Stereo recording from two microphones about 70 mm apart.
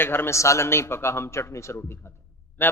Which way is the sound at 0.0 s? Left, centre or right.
Left.